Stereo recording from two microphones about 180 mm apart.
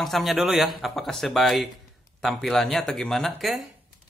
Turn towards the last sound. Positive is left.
turn(degrees=0)  # may be behind; listen again after turning